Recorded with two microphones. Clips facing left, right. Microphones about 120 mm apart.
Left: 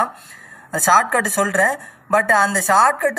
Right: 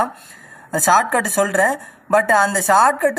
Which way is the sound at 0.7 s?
25° right (ahead or behind).